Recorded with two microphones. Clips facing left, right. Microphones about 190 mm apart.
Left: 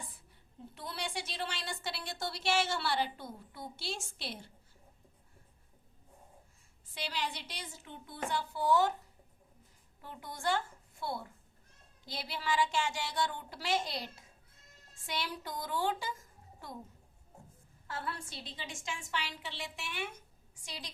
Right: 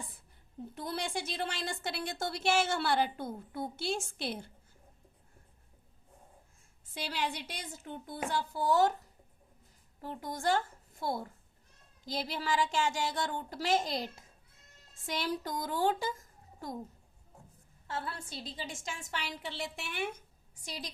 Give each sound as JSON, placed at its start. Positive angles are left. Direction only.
{"t": 0.7, "sound": "a woman's voice", "side_deg": -45}
{"t": 6.9, "sound": "a woman's voice", "side_deg": -50}
{"t": 10.0, "sound": "a woman's voice", "side_deg": -45}
{"t": 17.8, "sound": "a woman's voice", "side_deg": -25}